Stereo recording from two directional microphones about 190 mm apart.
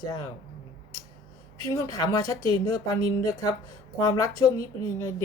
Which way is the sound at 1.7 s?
15° left (ahead or behind).